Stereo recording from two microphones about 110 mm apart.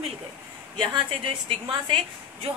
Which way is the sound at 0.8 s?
50° right (ahead or behind).